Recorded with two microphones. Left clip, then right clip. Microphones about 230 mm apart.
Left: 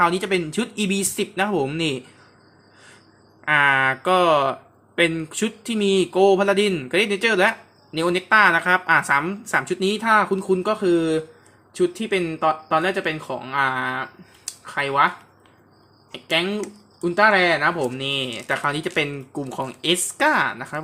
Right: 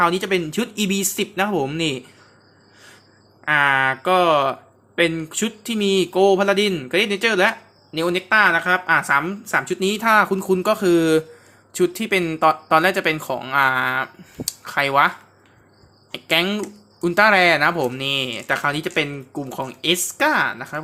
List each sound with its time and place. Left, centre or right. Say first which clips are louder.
0.0 s speech: right 1 dB; centre
3.4 s a woman's voice: even; centre
16.1 s speech: right 3 dB; centre